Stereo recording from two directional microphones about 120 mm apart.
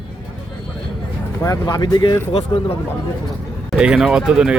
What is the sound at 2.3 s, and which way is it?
Speech, 55° left (ahead or behind).